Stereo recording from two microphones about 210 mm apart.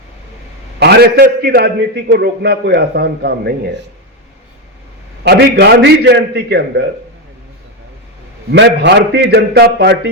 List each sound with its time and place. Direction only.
0.8 s a man's voice: 50° right (ahead or behind)
5.2 s a man's voice: 50° right (ahead or behind)
8.5 s a man's voice: 55° right (ahead or behind)